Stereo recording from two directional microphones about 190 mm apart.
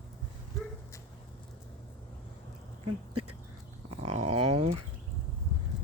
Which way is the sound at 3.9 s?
35° right (ahead or behind).